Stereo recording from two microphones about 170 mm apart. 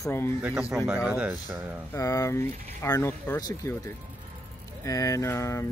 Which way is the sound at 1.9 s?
20° left (ahead or behind).